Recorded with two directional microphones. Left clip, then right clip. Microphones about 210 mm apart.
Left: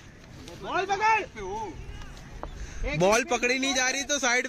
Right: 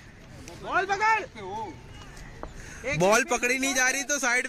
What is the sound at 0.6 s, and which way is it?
Speech, 40° left (ahead or behind).